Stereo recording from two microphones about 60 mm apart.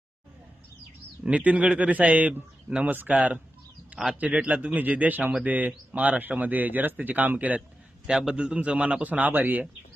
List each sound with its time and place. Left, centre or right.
1.2 s speech: right
3.9 s a man's voice: centre
4.2 s speech: right
8.0 s speech: centre; by 9.6 s right